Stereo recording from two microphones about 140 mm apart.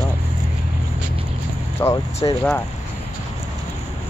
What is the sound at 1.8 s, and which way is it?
Speech, 25° left (ahead or behind).